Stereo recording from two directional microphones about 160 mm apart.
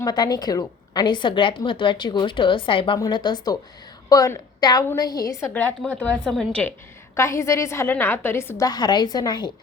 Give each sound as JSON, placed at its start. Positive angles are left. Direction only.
{"t": 0.0, "sound": "a woman's voice", "side_deg": 25}